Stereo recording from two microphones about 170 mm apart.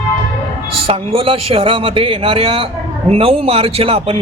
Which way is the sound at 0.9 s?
35° right (ahead or behind).